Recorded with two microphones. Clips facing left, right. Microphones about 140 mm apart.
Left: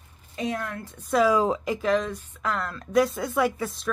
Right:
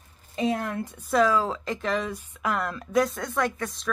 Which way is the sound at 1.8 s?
5° right (ahead or behind).